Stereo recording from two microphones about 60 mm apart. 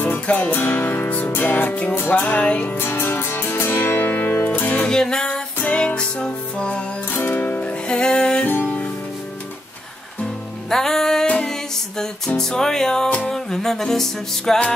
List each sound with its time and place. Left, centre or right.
0.0 s music: left
2.8 s music: left
4.5 s music: left
4.8 s music: centre
5.6 s music: left
5.9 s music: centre
7.2 s music: left
7.6 s music: centre
8.5 s music: left
10.7 s music: centre
12.4 s music: centre